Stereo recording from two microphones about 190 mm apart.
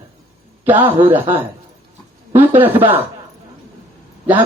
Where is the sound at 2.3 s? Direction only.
10° right (ahead or behind).